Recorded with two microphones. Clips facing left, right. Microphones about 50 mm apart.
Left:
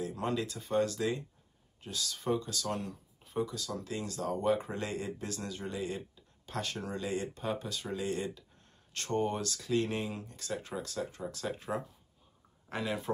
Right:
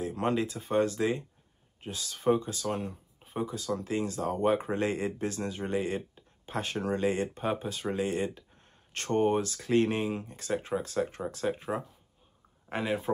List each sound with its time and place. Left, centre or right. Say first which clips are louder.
0.0 s a sound: right 5 dB; right
0.4 s speech: right 1 dB; right
6.4 s speech: right 4 dB; right
6.8 s speech: right 10 dB; right
11.0 s speech: right 6 dB; right
11.7 s speech: right 3 dB; right